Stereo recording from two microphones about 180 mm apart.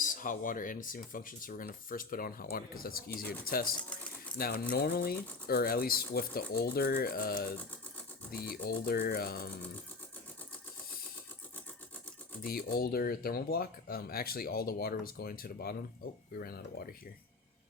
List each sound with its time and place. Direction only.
0.0 s speech: 45° left (ahead or behind)
12.4 s speech: 55° left (ahead or behind)